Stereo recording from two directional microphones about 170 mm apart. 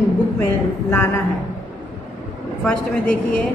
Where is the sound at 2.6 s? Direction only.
5° left (ahead or behind).